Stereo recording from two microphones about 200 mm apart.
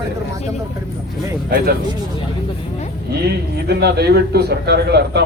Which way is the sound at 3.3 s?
55° right (ahead or behind).